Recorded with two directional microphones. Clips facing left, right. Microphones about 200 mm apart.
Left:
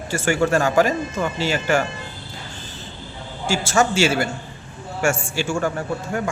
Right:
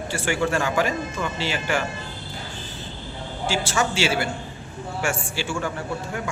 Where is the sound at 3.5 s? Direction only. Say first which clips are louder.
Left 5 dB; 45° left (ahead or behind).